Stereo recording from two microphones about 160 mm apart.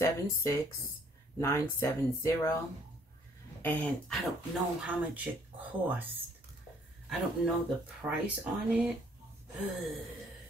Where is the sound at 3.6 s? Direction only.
10° left (ahead or behind).